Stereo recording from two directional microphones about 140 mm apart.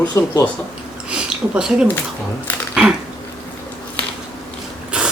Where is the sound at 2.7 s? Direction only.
5° right (ahead or behind).